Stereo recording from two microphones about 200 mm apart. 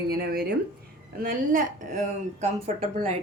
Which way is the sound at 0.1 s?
50° right (ahead or behind).